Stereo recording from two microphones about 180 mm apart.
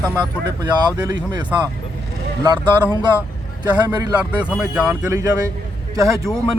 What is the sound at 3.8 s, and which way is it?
Speech, 20° right (ahead or behind).